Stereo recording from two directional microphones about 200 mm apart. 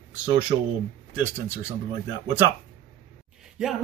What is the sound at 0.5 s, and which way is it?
Speech, 20° right (ahead or behind).